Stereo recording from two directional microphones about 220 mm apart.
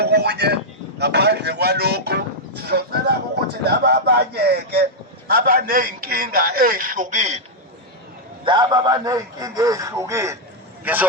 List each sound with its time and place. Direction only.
0.0 s a man's voice: 50° right (ahead or behind); by 7.3 s 35° right (ahead or behind)
8.4 s a man's voice: 20° right (ahead or behind)